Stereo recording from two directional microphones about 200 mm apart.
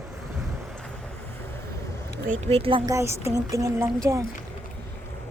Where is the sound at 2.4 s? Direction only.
30° right (ahead or behind).